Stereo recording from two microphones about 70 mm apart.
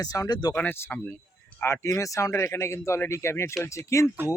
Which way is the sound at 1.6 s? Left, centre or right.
Left.